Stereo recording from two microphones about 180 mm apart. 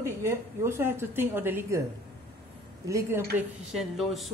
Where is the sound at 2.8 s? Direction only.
15° right (ahead or behind).